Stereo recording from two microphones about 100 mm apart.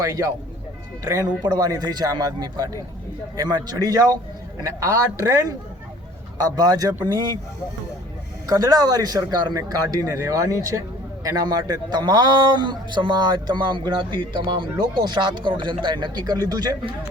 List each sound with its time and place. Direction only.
1.4 s a man's voice: 45° right (ahead or behind)
8.4 s speech: 35° right (ahead or behind)